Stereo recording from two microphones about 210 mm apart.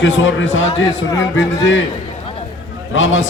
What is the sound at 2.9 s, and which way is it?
Speech, 65° left (ahead or behind).